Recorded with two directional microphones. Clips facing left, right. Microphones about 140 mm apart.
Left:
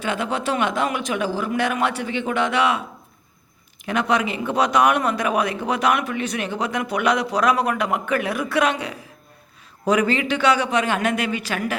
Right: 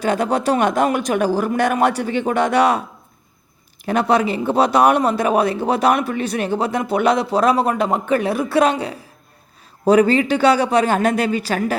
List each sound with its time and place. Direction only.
0.0 s a man's voice: 40° right (ahead or behind)
3.8 s a man's voice: 35° right (ahead or behind)